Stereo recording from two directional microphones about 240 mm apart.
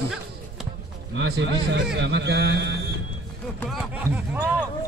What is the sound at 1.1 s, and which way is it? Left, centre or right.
A man's voice, right.